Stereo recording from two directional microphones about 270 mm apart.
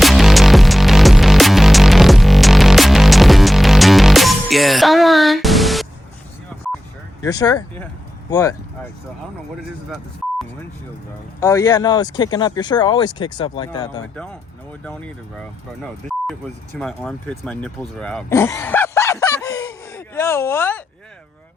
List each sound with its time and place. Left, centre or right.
0.0 s music: centre
7.2 s speech: centre
11.3 s speech: centre
15.8 s speech: centre